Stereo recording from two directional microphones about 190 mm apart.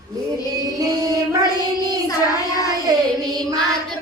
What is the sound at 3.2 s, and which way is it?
Music, 20° right (ahead or behind).